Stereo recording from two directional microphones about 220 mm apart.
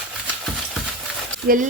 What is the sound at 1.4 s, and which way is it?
Speech, 40° right (ahead or behind).